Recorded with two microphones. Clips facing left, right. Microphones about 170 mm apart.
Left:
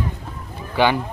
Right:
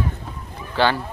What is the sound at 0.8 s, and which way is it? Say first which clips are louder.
Speech: left 2 dB; 15° left (ahead or behind).